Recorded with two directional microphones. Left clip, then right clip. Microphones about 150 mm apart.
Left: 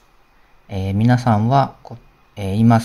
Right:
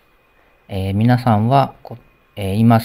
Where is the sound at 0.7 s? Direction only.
15° right (ahead or behind).